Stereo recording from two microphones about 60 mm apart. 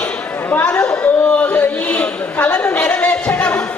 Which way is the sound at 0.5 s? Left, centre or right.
Left.